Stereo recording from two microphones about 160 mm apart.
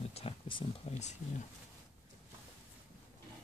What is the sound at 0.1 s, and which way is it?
Speech, 35° left (ahead or behind).